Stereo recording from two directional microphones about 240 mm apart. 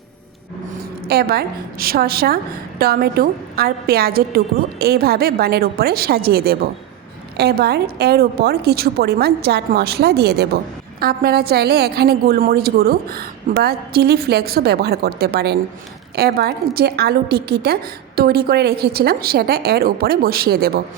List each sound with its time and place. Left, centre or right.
1.0 s a woman's voice: right